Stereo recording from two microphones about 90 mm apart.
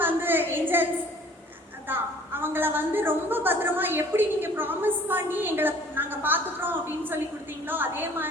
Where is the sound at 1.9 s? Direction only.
25° right (ahead or behind).